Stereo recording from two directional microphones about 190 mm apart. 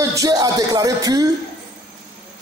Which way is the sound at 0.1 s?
20° right (ahead or behind).